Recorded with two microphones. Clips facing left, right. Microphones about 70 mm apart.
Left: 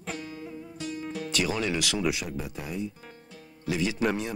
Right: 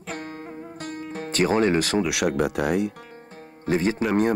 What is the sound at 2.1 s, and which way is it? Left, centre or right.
Speech, right.